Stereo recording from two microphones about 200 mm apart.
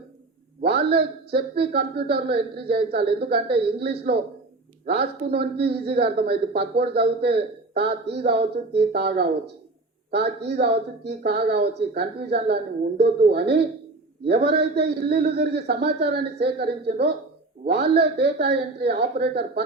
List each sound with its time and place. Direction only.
0.7 s a man's voice: 55° right (ahead or behind)